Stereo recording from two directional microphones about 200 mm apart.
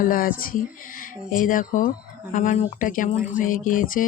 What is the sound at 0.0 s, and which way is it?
Speech, 45° left (ahead or behind).